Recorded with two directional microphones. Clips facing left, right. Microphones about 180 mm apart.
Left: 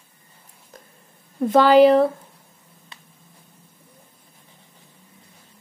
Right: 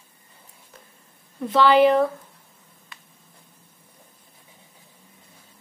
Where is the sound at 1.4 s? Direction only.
45° left (ahead or behind).